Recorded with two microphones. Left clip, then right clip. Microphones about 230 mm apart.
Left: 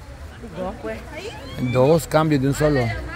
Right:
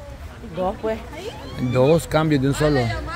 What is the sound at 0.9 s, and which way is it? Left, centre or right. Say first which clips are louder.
Speech: right 5 dB; right.